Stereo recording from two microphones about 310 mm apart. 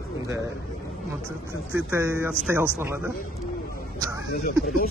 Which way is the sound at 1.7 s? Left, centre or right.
Centre.